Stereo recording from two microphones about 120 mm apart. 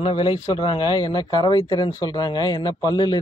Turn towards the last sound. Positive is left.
turn(degrees=35)  # may be behind; listen again after turning